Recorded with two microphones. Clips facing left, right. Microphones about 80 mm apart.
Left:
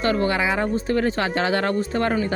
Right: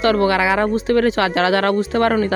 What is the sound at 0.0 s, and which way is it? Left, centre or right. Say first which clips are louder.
Speech: right 5 dB; right.